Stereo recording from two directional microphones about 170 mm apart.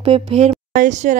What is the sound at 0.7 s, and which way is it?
Speech, 45° right (ahead or behind).